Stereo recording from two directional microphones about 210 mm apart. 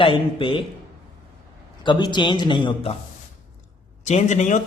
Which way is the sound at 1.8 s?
20° left (ahead or behind).